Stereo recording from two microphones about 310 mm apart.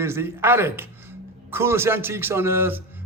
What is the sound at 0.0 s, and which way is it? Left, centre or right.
Speech, centre.